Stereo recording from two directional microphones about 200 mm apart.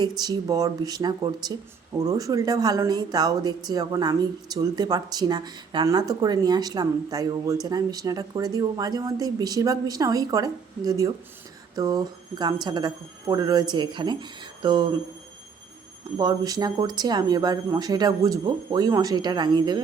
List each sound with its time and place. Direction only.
0.2 s speech: 20° right (ahead or behind)
16.1 s speech: 20° right (ahead or behind)